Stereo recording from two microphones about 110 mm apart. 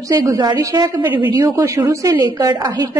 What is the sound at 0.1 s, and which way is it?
Speech, 35° right (ahead or behind).